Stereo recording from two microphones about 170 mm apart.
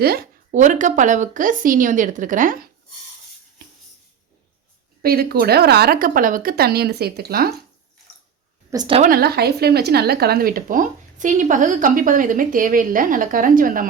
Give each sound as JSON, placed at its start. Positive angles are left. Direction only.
{"t": 0.0, "sound": "speech", "side_deg": -65}
{"t": 0.5, "sound": "speech", "side_deg": -45}
{"t": 5.0, "sound": "speech", "side_deg": -65}
{"t": 8.7, "sound": "speech", "side_deg": -25}
{"t": 9.0, "sound": "speech", "side_deg": -60}